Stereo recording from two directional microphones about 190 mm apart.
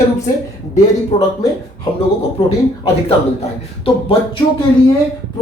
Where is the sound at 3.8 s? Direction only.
30° left (ahead or behind).